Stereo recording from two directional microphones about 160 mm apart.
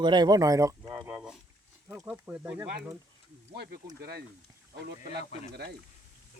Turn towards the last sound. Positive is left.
turn(degrees=50)  # may be behind; listen again after turning